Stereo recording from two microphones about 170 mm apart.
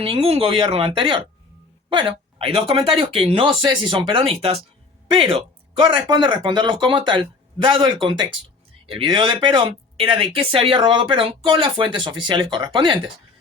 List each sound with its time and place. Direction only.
0.0 s speech: 35° right (ahead or behind)
8.9 s speech: 30° right (ahead or behind)